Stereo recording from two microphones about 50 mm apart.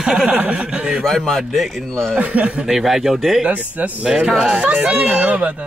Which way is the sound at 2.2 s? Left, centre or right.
Right.